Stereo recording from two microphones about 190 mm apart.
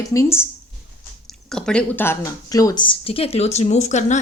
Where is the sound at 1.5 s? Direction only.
5° left (ahead or behind).